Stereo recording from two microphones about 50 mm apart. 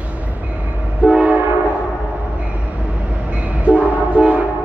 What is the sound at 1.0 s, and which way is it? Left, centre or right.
Train, right.